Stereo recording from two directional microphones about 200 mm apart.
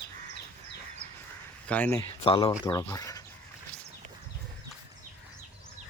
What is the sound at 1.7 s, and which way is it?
Speech, 10° left (ahead or behind).